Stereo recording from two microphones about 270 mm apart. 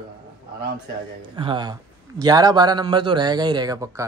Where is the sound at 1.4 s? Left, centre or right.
Centre.